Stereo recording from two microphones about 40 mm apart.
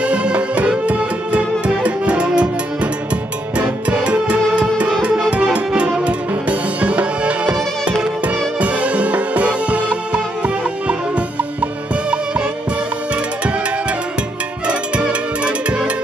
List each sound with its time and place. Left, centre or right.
0.0 s music: right
8.5 s music: right
14.7 s music: right